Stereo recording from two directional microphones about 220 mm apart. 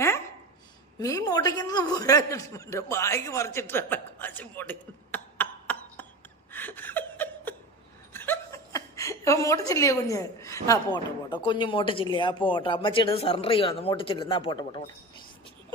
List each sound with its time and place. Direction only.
0.9 s a man's voice: 15° left (ahead or behind)
6.5 s chuckle: 10° left (ahead or behind)
8.1 s a woman's voice: 10° left (ahead or behind)